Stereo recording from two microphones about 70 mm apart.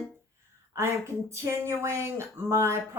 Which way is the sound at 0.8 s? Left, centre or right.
Right.